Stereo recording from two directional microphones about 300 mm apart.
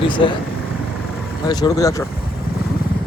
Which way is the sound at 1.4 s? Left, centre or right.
Centre.